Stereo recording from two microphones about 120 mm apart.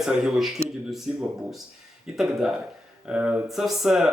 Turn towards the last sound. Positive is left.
turn(degrees=-5)  # may be behind; listen again after turning